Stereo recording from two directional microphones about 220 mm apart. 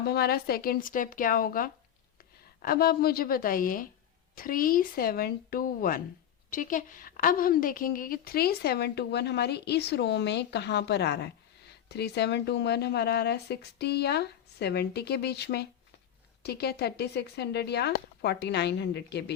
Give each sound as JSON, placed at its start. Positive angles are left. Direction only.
{"t": 0.0, "sound": "a woman's voice", "side_deg": 45}